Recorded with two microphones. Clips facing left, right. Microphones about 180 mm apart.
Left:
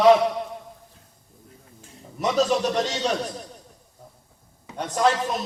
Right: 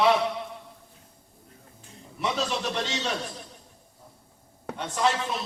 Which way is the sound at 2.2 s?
40° left (ahead or behind).